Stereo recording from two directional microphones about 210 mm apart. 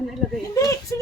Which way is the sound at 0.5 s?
15° left (ahead or behind).